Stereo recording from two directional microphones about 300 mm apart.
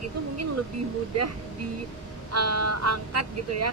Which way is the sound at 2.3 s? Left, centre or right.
Right.